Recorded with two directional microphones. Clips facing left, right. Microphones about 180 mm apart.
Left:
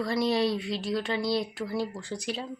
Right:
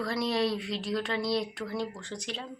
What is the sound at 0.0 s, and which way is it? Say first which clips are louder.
Speech: left 3 dB; centre (ahead or behind).